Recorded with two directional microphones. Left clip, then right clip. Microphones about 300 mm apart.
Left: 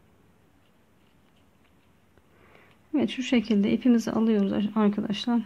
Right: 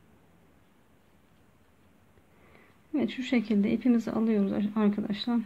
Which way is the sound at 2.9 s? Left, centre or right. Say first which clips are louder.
Left 4 dB; centre.